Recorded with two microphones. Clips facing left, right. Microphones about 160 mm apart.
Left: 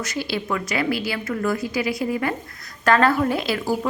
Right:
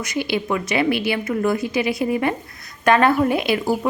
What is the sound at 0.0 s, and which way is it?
A woman's voice, 15° right (ahead or behind).